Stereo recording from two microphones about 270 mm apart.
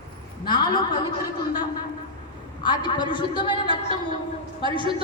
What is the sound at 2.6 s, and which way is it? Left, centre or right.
A man's voice, centre.